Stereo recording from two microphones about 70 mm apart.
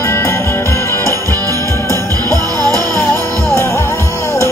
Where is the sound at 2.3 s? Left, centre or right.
Right.